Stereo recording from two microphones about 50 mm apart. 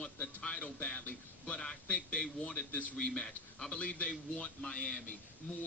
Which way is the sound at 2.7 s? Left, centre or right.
Left.